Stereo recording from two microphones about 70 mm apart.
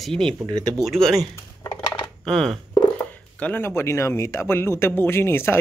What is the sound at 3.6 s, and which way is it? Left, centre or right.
Speech, left.